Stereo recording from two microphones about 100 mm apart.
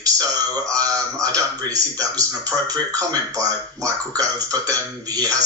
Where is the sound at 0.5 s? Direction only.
35° right (ahead or behind).